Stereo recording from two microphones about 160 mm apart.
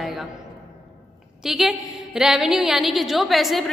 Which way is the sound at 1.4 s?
Centre (ahead or behind).